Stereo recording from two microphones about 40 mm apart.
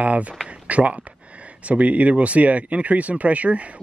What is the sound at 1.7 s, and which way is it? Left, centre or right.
Speech, right.